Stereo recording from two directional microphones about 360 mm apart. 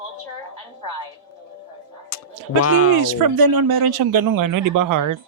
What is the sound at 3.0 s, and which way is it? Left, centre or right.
A man's voice, right.